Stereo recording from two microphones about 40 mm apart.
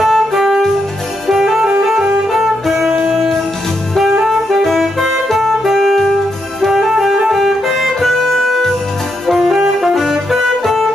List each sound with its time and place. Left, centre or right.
0.0 s music: centre
4.2 s music: centre
9.3 s saxophone: centre